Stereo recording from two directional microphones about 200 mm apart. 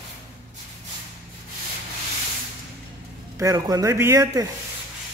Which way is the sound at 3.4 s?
15° right (ahead or behind).